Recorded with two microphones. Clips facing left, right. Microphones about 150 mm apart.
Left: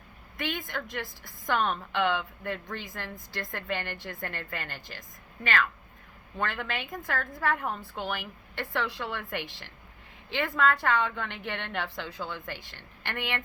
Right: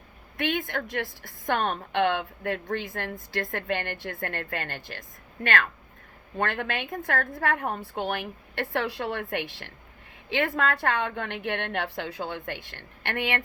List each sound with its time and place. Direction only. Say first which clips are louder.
0.3 s a woman's voice: right 5 dB; 60° right (ahead or behind)